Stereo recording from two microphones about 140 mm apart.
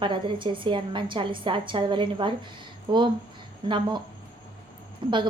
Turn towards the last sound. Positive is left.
turn(degrees=-35)  # may be behind; listen again after turning